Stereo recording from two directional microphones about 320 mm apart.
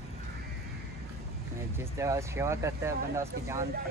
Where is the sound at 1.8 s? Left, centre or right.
Centre.